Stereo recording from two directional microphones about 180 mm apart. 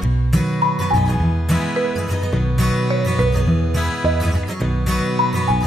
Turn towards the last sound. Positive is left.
turn(degrees=0)  # may be behind; listen again after turning